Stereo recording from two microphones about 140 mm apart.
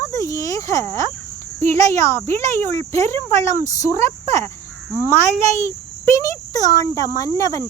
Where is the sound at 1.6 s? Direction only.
20° left (ahead or behind).